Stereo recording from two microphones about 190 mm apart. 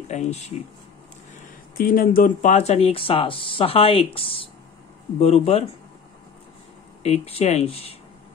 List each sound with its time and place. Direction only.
0.1 s speech: 35° left (ahead or behind)
1.8 s speech: 50° left (ahead or behind); by 5.7 s 30° left (ahead or behind)
7.0 s speech: 35° left (ahead or behind)